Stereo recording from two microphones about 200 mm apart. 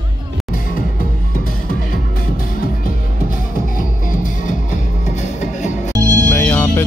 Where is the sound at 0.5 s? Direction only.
45° left (ahead or behind).